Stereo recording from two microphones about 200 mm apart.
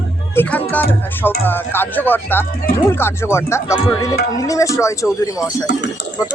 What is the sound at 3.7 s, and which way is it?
Music, 20° left (ahead or behind).